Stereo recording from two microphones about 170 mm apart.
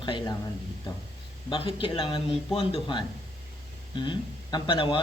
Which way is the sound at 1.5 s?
30° left (ahead or behind).